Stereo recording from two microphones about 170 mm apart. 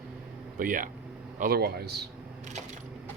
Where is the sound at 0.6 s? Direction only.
55° right (ahead or behind); by 2.0 s 70° right (ahead or behind).